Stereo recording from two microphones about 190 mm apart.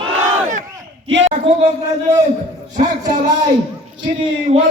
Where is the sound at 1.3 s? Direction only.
35° right (ahead or behind).